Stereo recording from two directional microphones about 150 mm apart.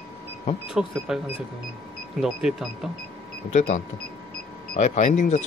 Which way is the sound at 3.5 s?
55° left (ahead or behind).